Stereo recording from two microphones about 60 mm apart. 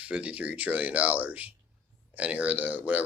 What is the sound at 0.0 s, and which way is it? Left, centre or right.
Speech, right.